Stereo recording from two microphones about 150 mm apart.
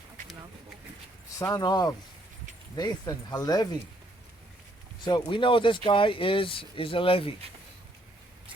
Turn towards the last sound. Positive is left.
turn(degrees=35)  # may be behind; listen again after turning